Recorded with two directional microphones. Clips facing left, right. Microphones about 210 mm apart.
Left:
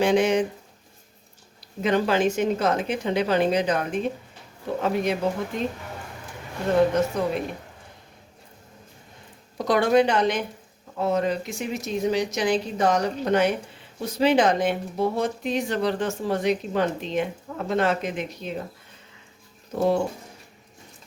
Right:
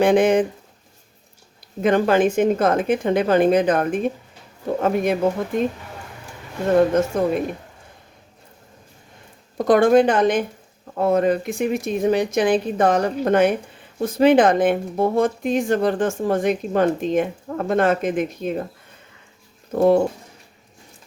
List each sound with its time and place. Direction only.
0.0 s speech: 55° right (ahead or behind)
1.8 s speech: 50° right (ahead or behind)
7.1 s speech: 50° right (ahead or behind)
9.6 s speech: 50° right (ahead or behind)
19.7 s speech: 55° right (ahead or behind)